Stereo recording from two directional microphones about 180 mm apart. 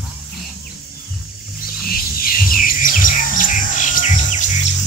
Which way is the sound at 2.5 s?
50° left (ahead or behind).